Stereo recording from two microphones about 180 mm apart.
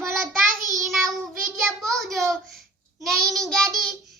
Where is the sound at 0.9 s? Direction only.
Centre (ahead or behind).